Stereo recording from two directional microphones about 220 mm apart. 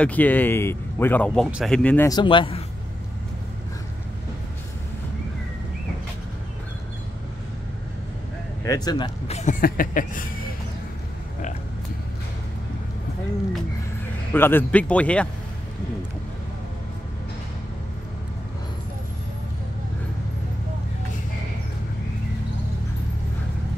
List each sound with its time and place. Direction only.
0.0 s speech: 5° left (ahead or behind)
2.0 s speech: 20° left (ahead or behind)
8.6 s speech: 15° left (ahead or behind)
9.4 s a sound: 40° left (ahead or behind)
14.3 s speech: 10° left (ahead or behind)